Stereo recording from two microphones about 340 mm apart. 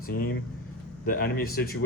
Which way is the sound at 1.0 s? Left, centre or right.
Left.